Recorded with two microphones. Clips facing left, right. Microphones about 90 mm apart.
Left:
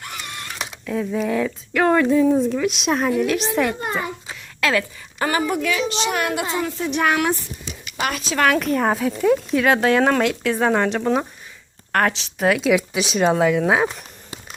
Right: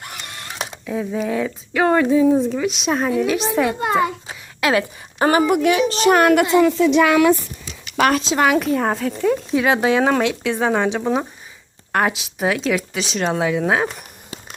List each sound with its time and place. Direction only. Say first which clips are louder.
0.9 s speech: even; 5° right (ahead or behind)
3.8 s a child's voice: right 7 dB; 90° right
4.3 s a sound: right 2 dB; 15° right (ahead or behind)
4.8 s a woman's voice: right 5 dB; 30° right (ahead or behind)
5.9 s a child's voice: right 9 dB; 45° right (ahead or behind); by 7.0 s 90° right
8.2 s a woman's voice: right 2 dB; 25° right (ahead or behind)
8.4 s speech: left 1 dB; 10° right (ahead or behind)